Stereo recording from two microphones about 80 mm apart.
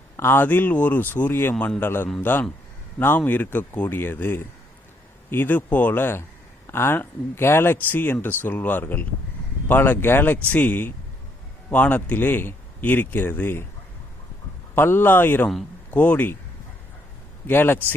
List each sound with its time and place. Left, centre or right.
0.2 s speech: left
14.8 s speech: left
17.4 s speech: left